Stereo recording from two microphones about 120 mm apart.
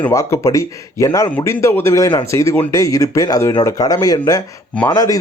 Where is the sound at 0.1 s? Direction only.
25° left (ahead or behind).